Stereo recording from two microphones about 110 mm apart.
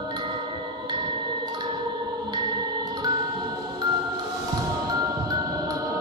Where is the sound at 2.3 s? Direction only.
40° right (ahead or behind).